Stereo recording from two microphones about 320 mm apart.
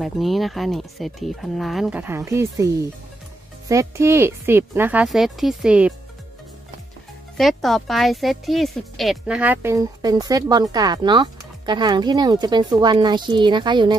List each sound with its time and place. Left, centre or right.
0.0 s speech: centre
7.3 s speech: centre